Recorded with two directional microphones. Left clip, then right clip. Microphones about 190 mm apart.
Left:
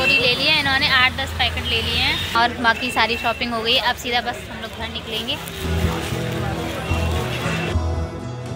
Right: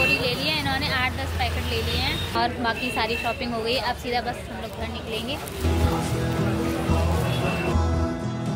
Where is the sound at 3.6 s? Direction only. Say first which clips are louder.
Left 7 dB; centre (ahead or behind).